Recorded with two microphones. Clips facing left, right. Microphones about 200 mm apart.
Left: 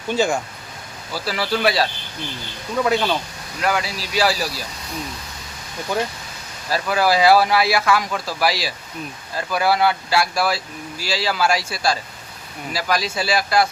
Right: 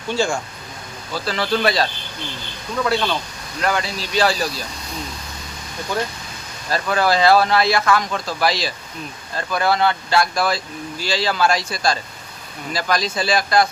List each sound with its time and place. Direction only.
0.1 s speech: 20° left (ahead or behind)
3.6 s speech: 5° left (ahead or behind)
6.7 s speech: 5° left (ahead or behind)